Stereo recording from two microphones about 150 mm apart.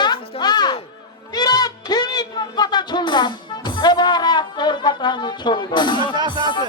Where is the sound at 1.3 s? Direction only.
25° left (ahead or behind).